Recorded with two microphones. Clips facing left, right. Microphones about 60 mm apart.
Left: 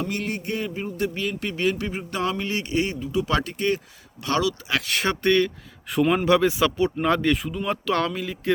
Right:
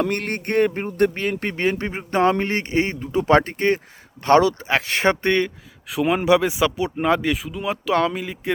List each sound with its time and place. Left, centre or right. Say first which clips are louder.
0.0 s speech: right 5 dB; right
5.9 s speech: right 2 dB; centre